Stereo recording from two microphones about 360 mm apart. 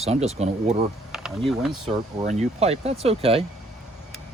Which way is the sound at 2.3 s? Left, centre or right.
Centre.